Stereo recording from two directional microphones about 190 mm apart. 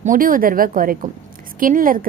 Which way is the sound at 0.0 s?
45° right (ahead or behind).